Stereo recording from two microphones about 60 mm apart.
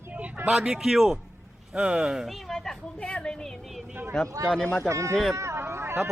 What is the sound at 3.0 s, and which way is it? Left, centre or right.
Speech, centre.